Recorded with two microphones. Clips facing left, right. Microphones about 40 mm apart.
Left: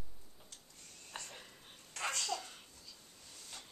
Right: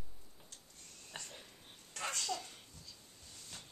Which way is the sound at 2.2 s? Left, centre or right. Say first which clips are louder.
Left 1 dB; centre.